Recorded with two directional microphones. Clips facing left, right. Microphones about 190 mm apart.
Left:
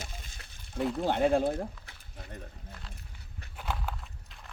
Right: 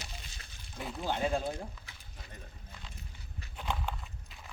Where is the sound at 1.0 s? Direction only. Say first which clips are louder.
Left 6 dB; 60° left (ahead or behind).